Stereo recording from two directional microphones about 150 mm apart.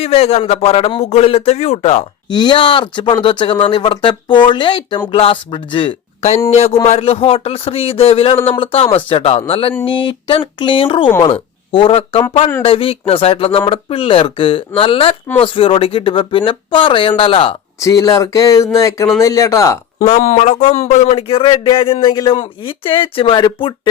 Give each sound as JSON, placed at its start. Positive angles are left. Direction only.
{"t": 0.0, "sound": "speech", "side_deg": 45}
{"t": 2.3, "sound": "speech", "side_deg": 30}
{"t": 6.5, "sound": "speech", "side_deg": 45}
{"t": 17.7, "sound": "speech", "side_deg": 20}
{"t": 20.0, "sound": "speech", "side_deg": 50}